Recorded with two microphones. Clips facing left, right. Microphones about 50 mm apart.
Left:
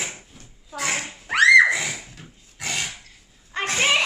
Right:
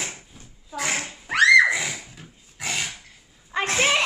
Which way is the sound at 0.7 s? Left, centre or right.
Centre.